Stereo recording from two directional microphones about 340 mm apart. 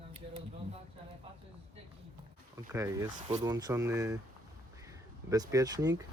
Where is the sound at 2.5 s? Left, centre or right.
Centre.